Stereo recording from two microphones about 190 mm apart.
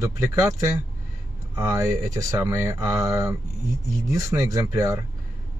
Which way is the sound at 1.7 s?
15° right (ahead or behind).